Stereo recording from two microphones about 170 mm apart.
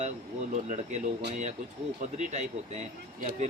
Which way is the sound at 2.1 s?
45° right (ahead or behind).